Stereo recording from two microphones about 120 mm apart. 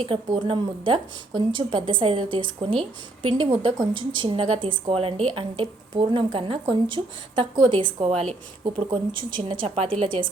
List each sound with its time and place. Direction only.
0.0 s speech: 45° right (ahead or behind)
9.4 s speech: 50° right (ahead or behind)